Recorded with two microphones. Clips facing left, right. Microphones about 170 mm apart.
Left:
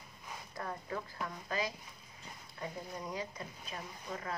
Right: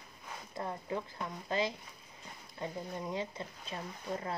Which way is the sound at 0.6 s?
20° right (ahead or behind).